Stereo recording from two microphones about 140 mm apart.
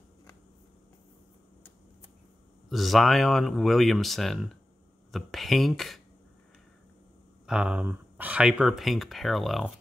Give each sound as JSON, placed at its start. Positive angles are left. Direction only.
{"t": 2.7, "sound": "speech", "side_deg": 0}
{"t": 7.4, "sound": "speech", "side_deg": -5}